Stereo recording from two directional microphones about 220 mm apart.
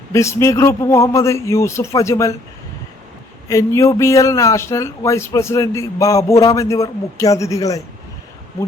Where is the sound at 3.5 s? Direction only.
15° left (ahead or behind).